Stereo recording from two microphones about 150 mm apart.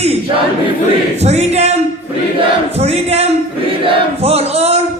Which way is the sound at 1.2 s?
45° right (ahead or behind).